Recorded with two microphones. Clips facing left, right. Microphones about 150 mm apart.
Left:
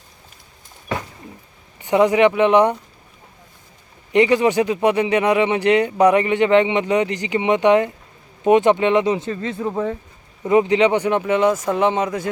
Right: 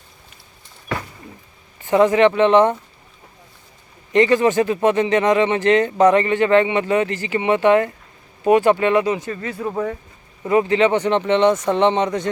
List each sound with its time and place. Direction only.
1.8 s speech: 15° left (ahead or behind)
4.1 s speech: 15° left (ahead or behind)